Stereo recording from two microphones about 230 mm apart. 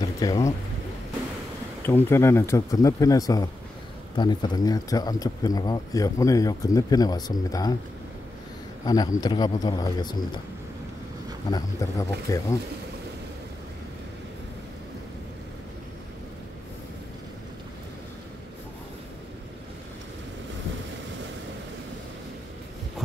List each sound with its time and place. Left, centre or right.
0.2 s speech: centre
1.9 s speech: centre
8.8 s speech: centre
11.5 s speech: centre